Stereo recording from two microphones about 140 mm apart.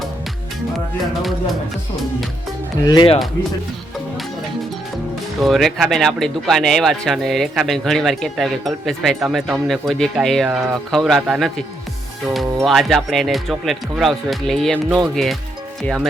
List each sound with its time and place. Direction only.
2.8 s speech: 30° left (ahead or behind)
5.4 s speech: centre (ahead or behind)